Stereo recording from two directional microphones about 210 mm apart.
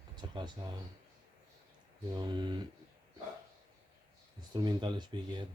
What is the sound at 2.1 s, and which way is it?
Speech, 20° right (ahead or behind).